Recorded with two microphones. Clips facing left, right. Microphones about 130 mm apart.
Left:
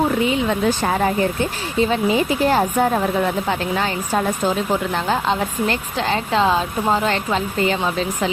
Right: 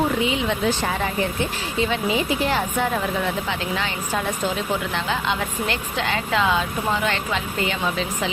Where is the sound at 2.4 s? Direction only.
40° left (ahead or behind).